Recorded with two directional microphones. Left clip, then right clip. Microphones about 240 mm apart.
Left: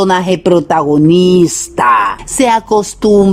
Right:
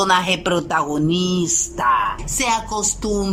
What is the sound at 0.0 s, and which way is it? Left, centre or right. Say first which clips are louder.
Speech: left 6 dB; left.